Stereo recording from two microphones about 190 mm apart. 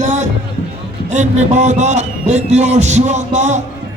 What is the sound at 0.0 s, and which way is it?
Music, 40° right (ahead or behind).